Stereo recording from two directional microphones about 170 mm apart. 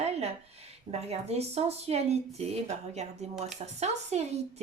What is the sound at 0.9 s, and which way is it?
Speech, 40° right (ahead or behind).